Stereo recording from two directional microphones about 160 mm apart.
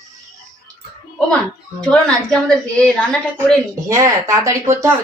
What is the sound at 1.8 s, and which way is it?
Speech, 5° left (ahead or behind).